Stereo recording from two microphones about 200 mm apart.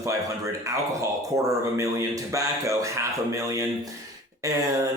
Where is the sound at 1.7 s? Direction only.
15° right (ahead or behind).